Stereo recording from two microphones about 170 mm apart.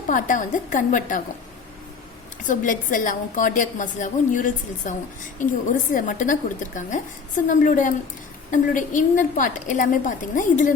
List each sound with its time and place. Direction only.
0.1 s a woman's voice: 50° left (ahead or behind)
2.4 s a woman's voice: 50° left (ahead or behind)